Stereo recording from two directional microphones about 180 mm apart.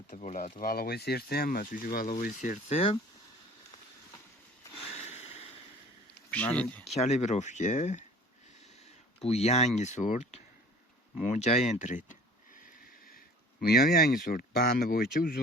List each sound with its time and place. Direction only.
0.1 s speech: 45° left (ahead or behind)
0.6 s speech: 55° left (ahead or behind); by 3.0 s 30° left (ahead or behind)
4.7 s a sound: 35° left (ahead or behind)
6.3 s speech: 10° left (ahead or behind)
6.9 s speech: 40° left (ahead or behind)
9.2 s speech: 35° left (ahead or behind)
13.1 s speech: 55° left (ahead or behind)